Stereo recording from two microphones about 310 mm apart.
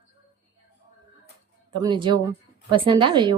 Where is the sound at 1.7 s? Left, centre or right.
Centre.